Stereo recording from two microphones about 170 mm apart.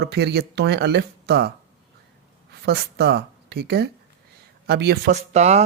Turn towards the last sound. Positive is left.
turn(degrees=-40)  # may be behind; listen again after turning